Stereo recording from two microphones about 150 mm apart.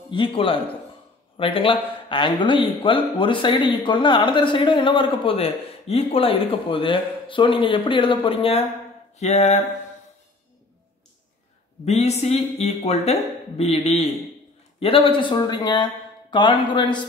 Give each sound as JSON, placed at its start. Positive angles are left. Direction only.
{"t": 0.1, "sound": "speech", "side_deg": 35}
{"t": 11.8, "sound": "speech", "side_deg": 45}